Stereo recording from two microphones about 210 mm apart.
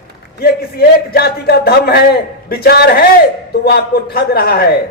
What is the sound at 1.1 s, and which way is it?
Speech, 50° left (ahead or behind).